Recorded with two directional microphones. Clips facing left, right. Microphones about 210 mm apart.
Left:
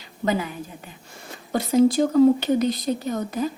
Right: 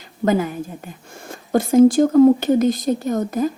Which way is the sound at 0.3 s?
45° right (ahead or behind).